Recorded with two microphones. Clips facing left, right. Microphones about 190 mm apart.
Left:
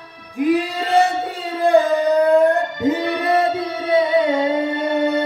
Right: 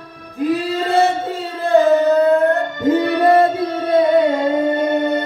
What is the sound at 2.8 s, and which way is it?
Music, 50° right (ahead or behind).